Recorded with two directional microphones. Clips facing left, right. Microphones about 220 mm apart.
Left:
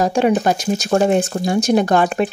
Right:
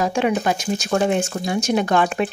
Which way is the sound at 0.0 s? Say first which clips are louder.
Left 4 dB; 40° left (ahead or behind).